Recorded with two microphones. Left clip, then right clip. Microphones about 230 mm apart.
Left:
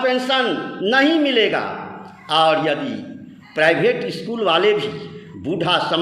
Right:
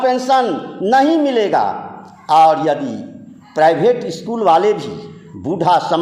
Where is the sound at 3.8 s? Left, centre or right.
Right.